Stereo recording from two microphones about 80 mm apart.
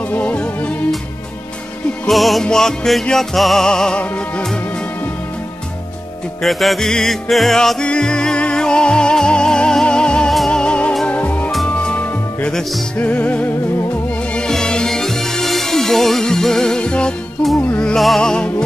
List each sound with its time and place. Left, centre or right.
0.1 s music: centre
2.0 s music: centre
6.4 s music: centre
17.9 s music: centre